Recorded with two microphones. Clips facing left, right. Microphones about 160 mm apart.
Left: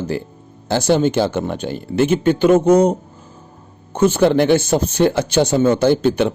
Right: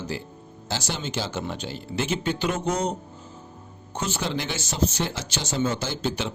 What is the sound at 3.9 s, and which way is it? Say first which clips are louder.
Speech: left 15 dB; 55° left (ahead or behind).